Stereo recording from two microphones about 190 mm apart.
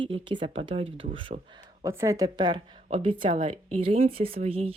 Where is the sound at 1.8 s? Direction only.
15° right (ahead or behind).